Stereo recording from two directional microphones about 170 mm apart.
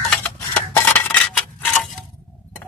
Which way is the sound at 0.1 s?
5° left (ahead or behind).